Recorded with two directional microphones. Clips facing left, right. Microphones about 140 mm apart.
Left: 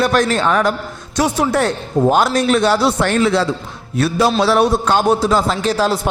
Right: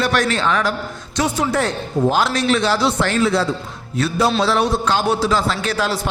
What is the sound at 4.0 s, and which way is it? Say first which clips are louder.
Music: left 3 dB; 65° left (ahead or behind).